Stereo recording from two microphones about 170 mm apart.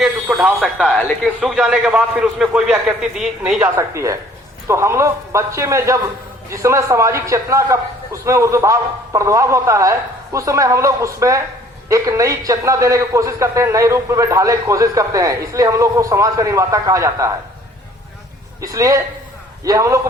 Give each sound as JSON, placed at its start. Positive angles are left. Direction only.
{"t": 0.0, "sound": "speech", "side_deg": -5}
{"t": 0.9, "sound": "speech", "side_deg": 10}
{"t": 1.4, "sound": "a man's voice", "side_deg": -5}
{"t": 3.6, "sound": "a man's voice", "side_deg": -15}
{"t": 18.6, "sound": "a man's voice", "side_deg": -20}